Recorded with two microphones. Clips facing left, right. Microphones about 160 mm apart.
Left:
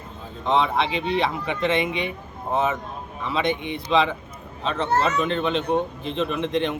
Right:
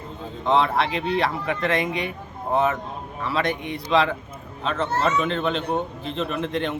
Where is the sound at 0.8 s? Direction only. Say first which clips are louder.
Even; 20° left (ahead or behind).